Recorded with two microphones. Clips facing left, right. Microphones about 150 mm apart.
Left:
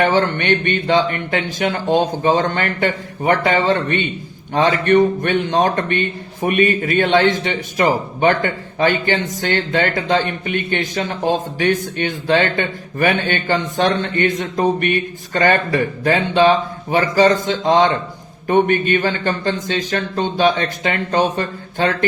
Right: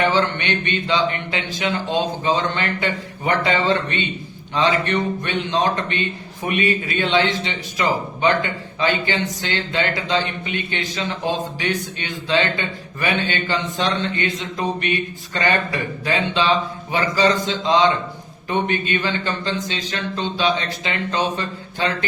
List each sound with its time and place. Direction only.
0.0 s speech: 45° left (ahead or behind)